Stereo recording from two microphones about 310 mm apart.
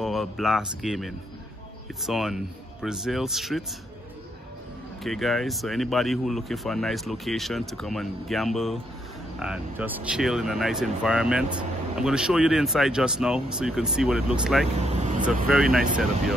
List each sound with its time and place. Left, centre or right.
0.0 s speech: centre
5.0 s speech: centre
14.9 s speech: right
15.4 s speech: centre